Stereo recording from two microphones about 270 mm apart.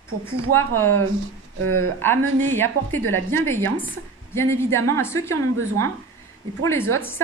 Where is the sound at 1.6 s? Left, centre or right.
Right.